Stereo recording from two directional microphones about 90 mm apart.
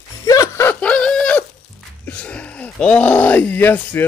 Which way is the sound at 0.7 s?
15° left (ahead or behind).